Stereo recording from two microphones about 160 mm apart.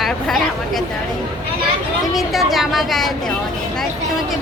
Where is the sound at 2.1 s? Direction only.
Centre (ahead or behind).